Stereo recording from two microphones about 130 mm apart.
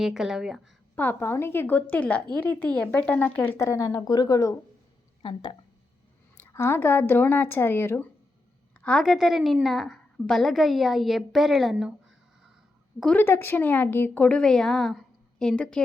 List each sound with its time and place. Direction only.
0.0 s a woman's voice: 5° right (ahead or behind)
0.9 s speech: 15° left (ahead or behind)
5.2 s speech: 40° left (ahead or behind)
6.3 s speech: 20° left (ahead or behind)
8.8 s a woman's voice: 5° left (ahead or behind)
13.0 s speech: 10° left (ahead or behind)